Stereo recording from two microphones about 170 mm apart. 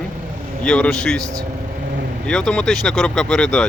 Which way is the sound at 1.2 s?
20° right (ahead or behind).